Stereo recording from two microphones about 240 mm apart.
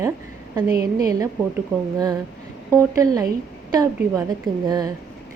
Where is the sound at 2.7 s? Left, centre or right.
Centre.